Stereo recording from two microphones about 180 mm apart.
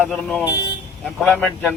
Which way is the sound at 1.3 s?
10° left (ahead or behind).